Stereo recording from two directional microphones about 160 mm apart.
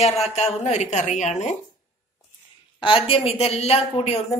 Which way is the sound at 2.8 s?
35° left (ahead or behind).